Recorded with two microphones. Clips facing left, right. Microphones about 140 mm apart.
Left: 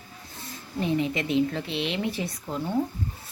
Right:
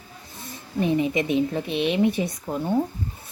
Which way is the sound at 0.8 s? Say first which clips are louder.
Right 4 dB; 15° right (ahead or behind).